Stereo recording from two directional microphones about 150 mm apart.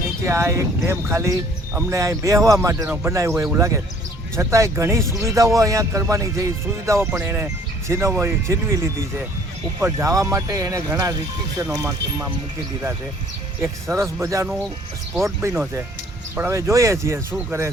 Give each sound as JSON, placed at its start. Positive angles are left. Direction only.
{"t": 0.3, "sound": "a man's voice", "side_deg": -20}
{"t": 9.8, "sound": "a man's voice", "side_deg": -20}
{"t": 13.8, "sound": "a man's voice", "side_deg": -20}